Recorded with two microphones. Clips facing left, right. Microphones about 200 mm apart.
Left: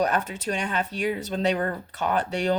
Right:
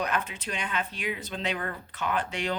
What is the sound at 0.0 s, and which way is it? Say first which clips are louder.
Speech: left 6 dB; 45° left (ahead or behind).